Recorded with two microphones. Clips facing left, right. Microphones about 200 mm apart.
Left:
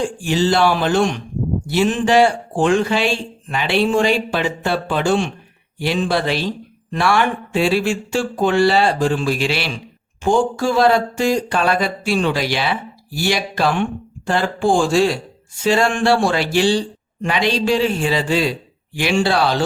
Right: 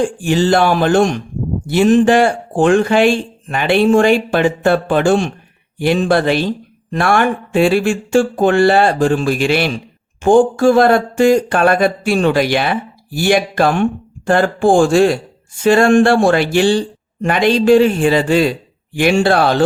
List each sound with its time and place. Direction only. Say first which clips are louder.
0.0 s speech: right 4 dB; 50° right (ahead or behind)